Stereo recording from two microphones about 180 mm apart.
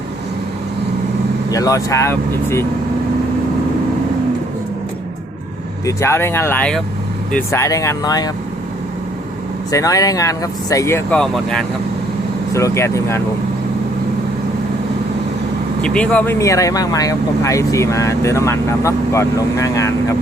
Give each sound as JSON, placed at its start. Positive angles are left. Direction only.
{"t": 1.5, "sound": "speech", "side_deg": 20}
{"t": 5.8, "sound": "speech", "side_deg": 15}
{"t": 9.7, "sound": "speech", "side_deg": 20}
{"t": 12.5, "sound": "speech", "side_deg": 15}
{"t": 15.8, "sound": "speech", "side_deg": 5}